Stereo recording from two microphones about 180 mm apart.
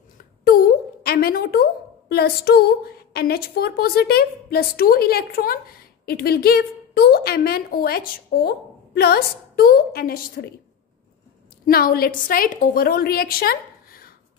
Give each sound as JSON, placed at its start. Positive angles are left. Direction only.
{"t": 0.5, "sound": "a woman's voice", "side_deg": 55}
{"t": 11.6, "sound": "a woman's voice", "side_deg": 55}